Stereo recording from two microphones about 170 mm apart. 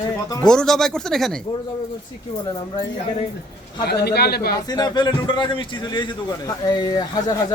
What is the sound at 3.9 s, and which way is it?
Speech, 70° left (ahead or behind).